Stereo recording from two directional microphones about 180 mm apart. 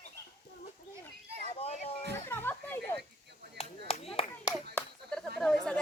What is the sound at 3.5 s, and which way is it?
Clapping, 35° left (ahead or behind).